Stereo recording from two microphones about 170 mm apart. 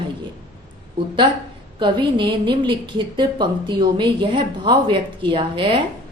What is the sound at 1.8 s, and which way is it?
A woman's voice, 30° right (ahead or behind).